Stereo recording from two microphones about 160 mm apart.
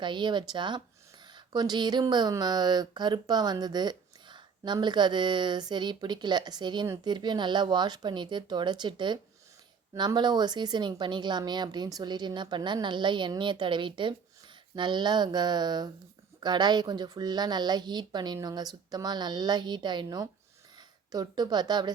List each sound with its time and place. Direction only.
0.0 s speech: 30° right (ahead or behind)